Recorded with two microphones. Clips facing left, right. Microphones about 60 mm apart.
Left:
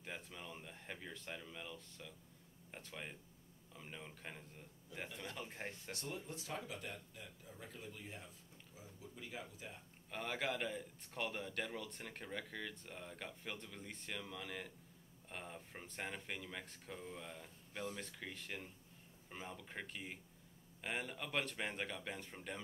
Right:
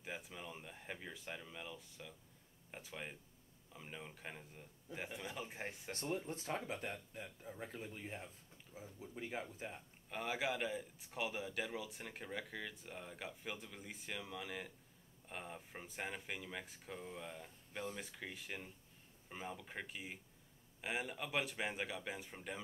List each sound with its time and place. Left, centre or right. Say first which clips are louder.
0.0 s speech: right 2 dB; centre
5.9 s speech: right 5 dB; right
10.1 s speech: right 1 dB; centre